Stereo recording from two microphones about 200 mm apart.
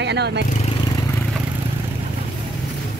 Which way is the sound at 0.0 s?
60° right (ahead or behind).